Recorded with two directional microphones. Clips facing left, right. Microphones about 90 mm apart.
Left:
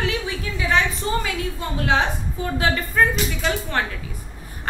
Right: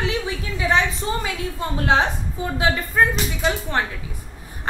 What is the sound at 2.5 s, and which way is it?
A woman's voice, 10° right (ahead or behind).